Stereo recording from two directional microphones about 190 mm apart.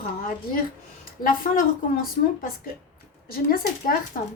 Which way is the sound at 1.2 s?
45° left (ahead or behind).